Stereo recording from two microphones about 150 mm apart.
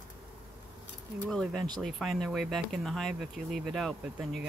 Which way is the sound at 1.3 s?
Centre (ahead or behind).